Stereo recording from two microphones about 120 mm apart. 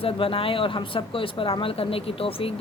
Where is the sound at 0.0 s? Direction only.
50° left (ahead or behind).